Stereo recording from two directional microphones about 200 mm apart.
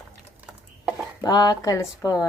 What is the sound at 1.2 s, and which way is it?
Speech, 20° left (ahead or behind).